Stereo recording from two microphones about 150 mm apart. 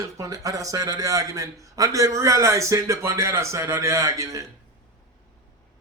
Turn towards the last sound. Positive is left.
turn(degrees=-20)  # may be behind; listen again after turning